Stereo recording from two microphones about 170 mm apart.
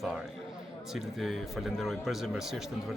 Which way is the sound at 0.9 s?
Centre (ahead or behind).